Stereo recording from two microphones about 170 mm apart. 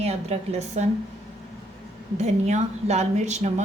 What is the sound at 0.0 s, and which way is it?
Speech, 40° right (ahead or behind).